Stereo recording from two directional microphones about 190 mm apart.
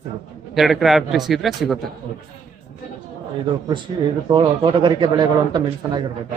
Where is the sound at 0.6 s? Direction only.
Centre (ahead or behind).